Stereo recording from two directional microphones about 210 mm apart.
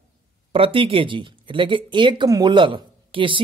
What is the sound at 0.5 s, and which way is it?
Speech, 25° right (ahead or behind).